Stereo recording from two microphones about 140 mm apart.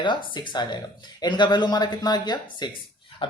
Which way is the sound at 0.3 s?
35° left (ahead or behind).